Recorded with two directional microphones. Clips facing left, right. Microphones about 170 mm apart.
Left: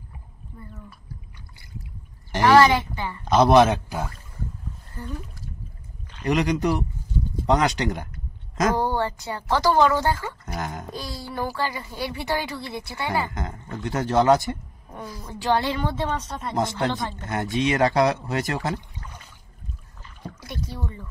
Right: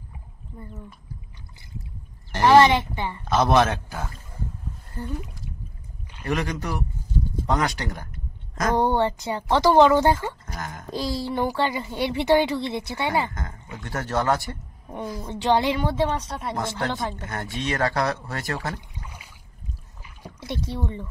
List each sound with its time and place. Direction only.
2.4 s a woman's voice: 20° right (ahead or behind)
3.3 s speech: 15° left (ahead or behind)
6.2 s speech: 15° left (ahead or behind)
8.7 s speech: 20° right (ahead or behind)
10.5 s speech: 20° left (ahead or behind)
10.9 s speech: 25° right (ahead or behind)
13.8 s speech: 15° left (ahead or behind)
14.9 s a woman's voice: 25° right (ahead or behind)
16.5 s speech: 20° left (ahead or behind)
18.9 s a sound: 10° right (ahead or behind)
20.3 s speech: 25° right (ahead or behind)